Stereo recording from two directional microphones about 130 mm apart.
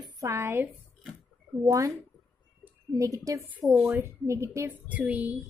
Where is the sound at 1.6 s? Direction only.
25° right (ahead or behind).